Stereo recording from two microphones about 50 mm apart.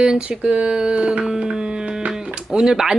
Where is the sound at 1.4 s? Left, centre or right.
Centre.